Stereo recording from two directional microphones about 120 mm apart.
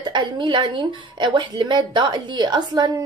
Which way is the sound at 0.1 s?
40° right (ahead or behind).